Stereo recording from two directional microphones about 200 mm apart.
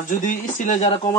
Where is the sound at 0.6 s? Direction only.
35° left (ahead or behind).